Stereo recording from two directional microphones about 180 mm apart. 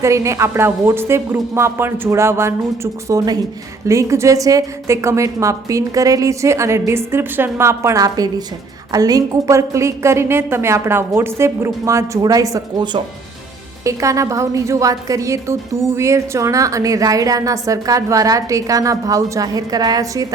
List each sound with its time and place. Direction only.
0.0 s a woman's voice: 15° right (ahead or behind)